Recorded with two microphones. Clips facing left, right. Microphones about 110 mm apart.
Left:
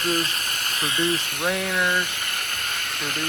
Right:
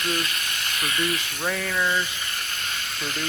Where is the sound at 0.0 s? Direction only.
40° left (ahead or behind).